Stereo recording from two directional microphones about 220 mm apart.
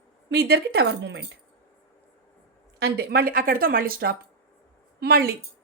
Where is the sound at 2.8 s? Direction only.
45° right (ahead or behind).